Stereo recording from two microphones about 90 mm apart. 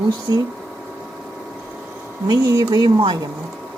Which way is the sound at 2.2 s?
45° right (ahead or behind).